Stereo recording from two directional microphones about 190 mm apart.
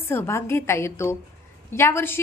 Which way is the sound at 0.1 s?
15° left (ahead or behind).